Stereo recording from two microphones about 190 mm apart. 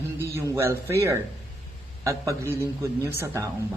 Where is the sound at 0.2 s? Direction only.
15° right (ahead or behind).